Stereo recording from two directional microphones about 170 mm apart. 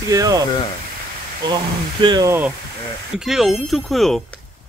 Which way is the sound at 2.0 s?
25° right (ahead or behind).